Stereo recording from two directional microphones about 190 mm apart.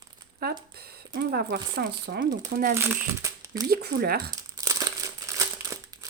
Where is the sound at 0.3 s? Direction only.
55° right (ahead or behind).